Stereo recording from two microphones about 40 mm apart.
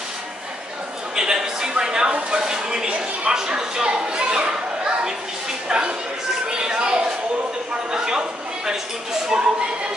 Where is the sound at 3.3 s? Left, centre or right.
Centre.